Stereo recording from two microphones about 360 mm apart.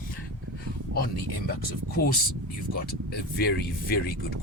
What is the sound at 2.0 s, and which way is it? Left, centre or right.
Speech, left.